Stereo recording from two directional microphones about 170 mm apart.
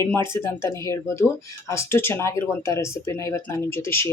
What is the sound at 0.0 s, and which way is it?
Speech, 15° left (ahead or behind).